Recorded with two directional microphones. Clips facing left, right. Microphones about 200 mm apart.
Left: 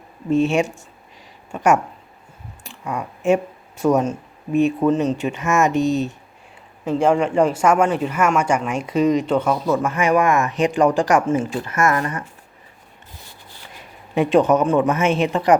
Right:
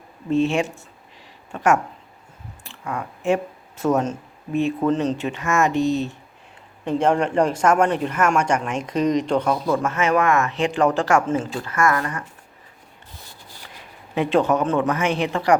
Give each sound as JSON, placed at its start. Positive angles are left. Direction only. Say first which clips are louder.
{"t": 0.3, "sound": "speech", "louder": "left 2 dB", "side_deg": 15}
{"t": 6.8, "sound": "speech", "louder": "left 2 dB", "side_deg": 5}
{"t": 14.2, "sound": "speech", "louder": "left 4 dB", "side_deg": 15}